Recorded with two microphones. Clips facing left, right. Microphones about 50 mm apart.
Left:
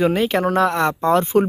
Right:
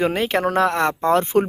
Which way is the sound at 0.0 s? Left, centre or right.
Right.